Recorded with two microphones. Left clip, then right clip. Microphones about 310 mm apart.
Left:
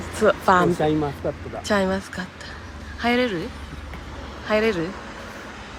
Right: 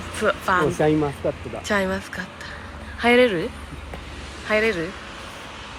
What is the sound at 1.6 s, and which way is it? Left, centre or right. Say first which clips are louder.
Speech: left 1 dB; centre.